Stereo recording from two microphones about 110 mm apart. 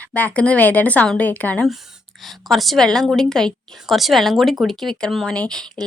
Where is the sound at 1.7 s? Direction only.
Centre (ahead or behind).